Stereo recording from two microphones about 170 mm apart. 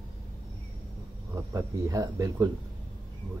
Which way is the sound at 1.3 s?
15° right (ahead or behind).